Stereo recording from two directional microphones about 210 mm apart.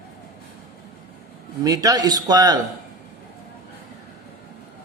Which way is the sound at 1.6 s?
15° right (ahead or behind).